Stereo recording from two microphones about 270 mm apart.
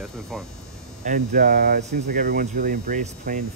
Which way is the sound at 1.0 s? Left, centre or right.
Right.